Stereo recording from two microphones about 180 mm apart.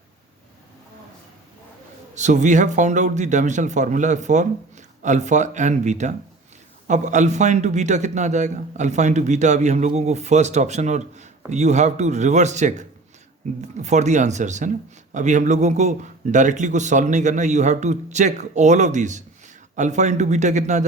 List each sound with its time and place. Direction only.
2.1 s a man's voice: 40° right (ahead or behind)